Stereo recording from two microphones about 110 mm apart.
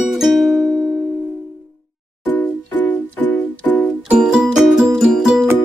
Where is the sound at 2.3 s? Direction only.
15° left (ahead or behind).